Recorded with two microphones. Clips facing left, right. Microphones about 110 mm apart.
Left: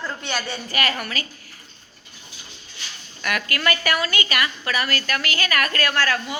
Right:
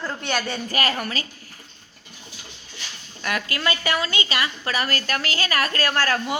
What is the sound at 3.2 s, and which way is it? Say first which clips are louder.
A woman's voice: left 1 dB; 25° right (ahead or behind).